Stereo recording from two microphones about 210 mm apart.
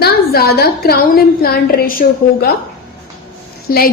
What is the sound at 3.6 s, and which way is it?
Speech, 45° left (ahead or behind).